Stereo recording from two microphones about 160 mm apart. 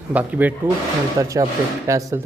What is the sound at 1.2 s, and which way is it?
Speech, 20° right (ahead or behind).